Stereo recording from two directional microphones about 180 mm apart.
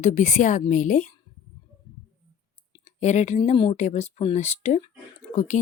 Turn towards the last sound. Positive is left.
turn(degrees=40)  # may be behind; listen again after turning